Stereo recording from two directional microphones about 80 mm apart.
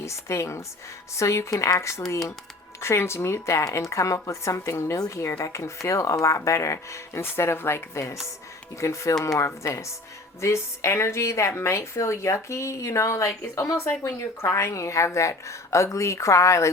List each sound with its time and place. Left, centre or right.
0.0 s a woman's voice: left